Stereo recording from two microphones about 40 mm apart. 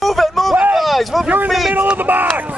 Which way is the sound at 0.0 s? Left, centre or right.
Centre.